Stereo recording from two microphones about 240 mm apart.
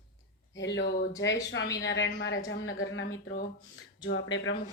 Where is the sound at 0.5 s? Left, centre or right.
Left.